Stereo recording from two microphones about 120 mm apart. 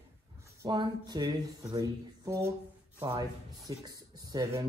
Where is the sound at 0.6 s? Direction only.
35° right (ahead or behind).